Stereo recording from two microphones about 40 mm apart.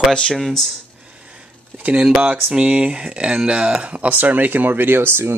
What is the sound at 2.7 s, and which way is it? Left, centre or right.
Speech, right.